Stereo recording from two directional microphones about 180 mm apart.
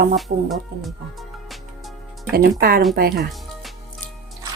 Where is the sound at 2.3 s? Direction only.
60° right (ahead or behind).